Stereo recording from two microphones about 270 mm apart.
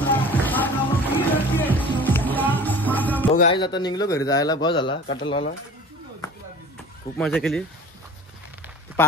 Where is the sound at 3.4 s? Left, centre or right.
Centre.